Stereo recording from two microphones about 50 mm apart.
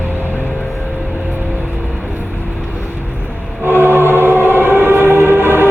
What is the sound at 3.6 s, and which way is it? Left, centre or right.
Music, right.